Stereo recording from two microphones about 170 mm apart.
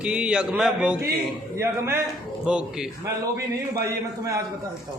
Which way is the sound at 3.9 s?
20° right (ahead or behind).